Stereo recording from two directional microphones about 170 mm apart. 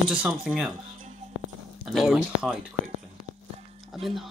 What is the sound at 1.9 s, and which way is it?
Speech, centre (ahead or behind).